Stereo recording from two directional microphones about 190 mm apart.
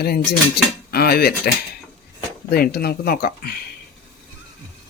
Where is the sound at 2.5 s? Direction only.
55° left (ahead or behind).